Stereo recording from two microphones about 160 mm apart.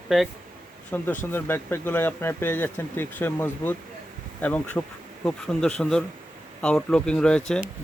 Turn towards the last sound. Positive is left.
turn(degrees=5)  # may be behind; listen again after turning